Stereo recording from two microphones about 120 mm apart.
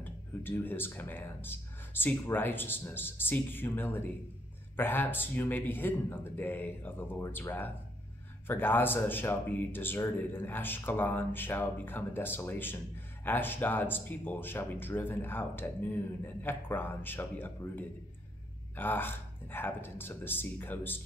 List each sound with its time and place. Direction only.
0.0 s speech: 15° left (ahead or behind)